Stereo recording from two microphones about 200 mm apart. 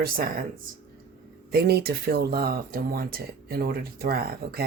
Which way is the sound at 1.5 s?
55° right (ahead or behind).